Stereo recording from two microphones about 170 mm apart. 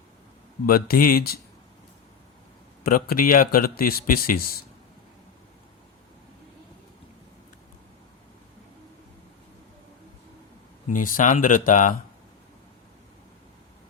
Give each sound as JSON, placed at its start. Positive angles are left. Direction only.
{"t": 0.7, "sound": "a man's voice", "side_deg": 60}
{"t": 2.8, "sound": "a man's voice", "side_deg": 55}
{"t": 10.8, "sound": "speech", "side_deg": 50}